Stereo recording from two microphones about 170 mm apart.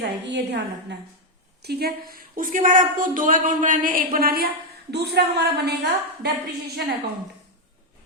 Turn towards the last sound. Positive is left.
turn(degrees=-75)  # may be behind; listen again after turning